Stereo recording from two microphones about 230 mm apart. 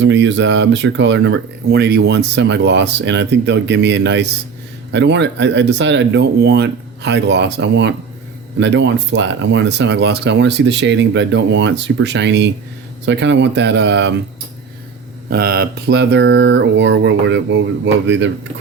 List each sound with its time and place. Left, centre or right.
0.0 s speech: right
15.3 s speech: right